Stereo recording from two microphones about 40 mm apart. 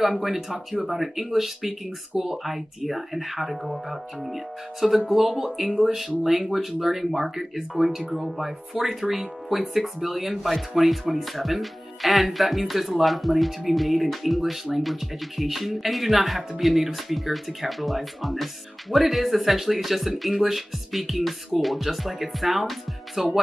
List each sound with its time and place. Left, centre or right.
0.3 s speech: centre
5.7 s speech: right
5.9 s speech: centre